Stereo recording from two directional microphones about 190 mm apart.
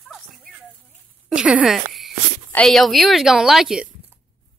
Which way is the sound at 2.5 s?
Centre (ahead or behind).